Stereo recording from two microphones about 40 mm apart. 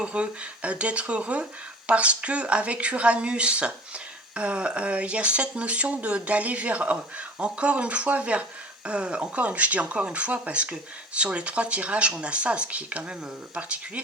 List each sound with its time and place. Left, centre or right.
0.0 s speech: right